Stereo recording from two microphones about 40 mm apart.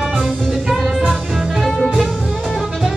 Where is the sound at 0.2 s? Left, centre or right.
Centre.